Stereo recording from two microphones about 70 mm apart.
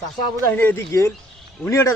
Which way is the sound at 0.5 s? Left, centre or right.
Left.